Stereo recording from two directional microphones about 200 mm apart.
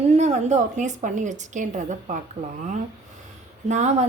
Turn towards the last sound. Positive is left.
turn(degrees=-35)  # may be behind; listen again after turning